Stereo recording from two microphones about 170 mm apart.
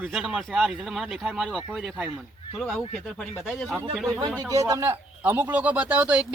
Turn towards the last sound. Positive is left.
turn(degrees=-5)  # may be behind; listen again after turning